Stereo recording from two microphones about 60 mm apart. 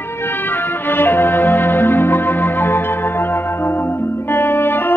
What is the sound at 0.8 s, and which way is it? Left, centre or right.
Music, left.